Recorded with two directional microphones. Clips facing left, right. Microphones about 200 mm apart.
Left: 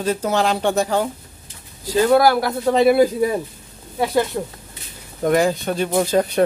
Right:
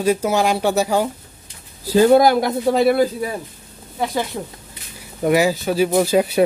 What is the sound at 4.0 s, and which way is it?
Speech, 5° left (ahead or behind).